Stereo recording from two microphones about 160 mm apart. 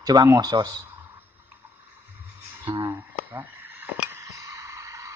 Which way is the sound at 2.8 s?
15° right (ahead or behind).